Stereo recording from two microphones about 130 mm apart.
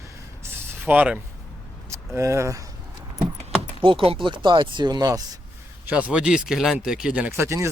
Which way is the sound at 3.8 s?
45° right (ahead or behind).